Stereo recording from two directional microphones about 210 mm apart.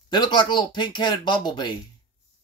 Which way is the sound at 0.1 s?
20° left (ahead or behind).